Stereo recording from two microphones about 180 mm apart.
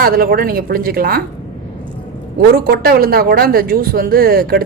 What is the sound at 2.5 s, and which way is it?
A man's voice, 55° right (ahead or behind).